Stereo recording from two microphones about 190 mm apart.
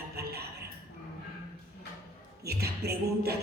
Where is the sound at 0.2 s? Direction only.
55° right (ahead or behind).